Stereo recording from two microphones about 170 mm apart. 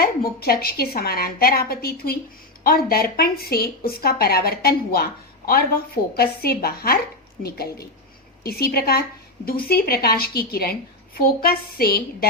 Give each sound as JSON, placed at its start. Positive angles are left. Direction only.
{"t": 0.0, "sound": "a woman's voice", "side_deg": 60}